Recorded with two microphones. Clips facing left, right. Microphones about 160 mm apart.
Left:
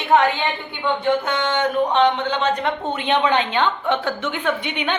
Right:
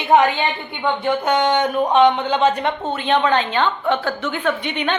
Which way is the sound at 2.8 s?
15° left (ahead or behind).